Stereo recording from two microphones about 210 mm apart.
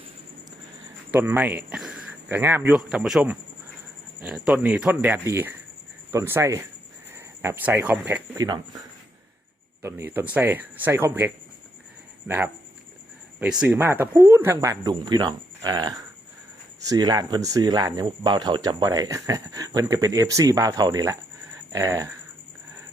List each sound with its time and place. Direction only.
1.1 s speech: 10° right (ahead or behind)
8.4 s speech: 20° right (ahead or behind)
9.8 s speech: 10° right (ahead or behind)
13.4 s speech: 5° right (ahead or behind)
16.9 s speech: 15° right (ahead or behind)